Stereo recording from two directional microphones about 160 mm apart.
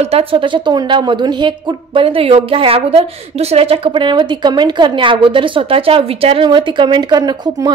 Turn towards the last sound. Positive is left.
turn(degrees=-25)  # may be behind; listen again after turning